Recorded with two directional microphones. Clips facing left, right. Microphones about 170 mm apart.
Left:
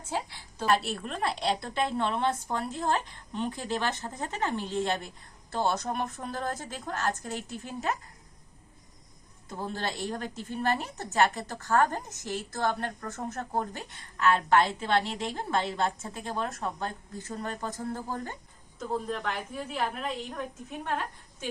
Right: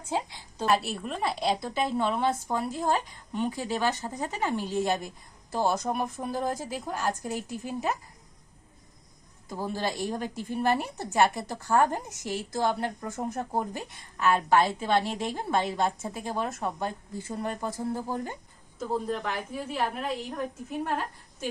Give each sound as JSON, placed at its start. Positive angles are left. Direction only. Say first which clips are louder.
{"t": 0.1, "sound": "a woman's voice", "louder": "right 3 dB", "side_deg": -15}
{"t": 0.8, "sound": "a woman's voice", "louder": "right 1 dB", "side_deg": -5}
{"t": 9.5, "sound": "a woman's voice", "louder": "right 3 dB", "side_deg": -10}
{"t": 18.9, "sound": "a woman's voice", "louder": "right 2 dB", "side_deg": -5}